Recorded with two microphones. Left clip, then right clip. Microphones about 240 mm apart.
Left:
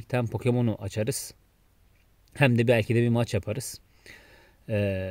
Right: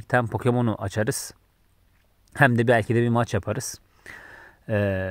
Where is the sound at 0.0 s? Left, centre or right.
Centre.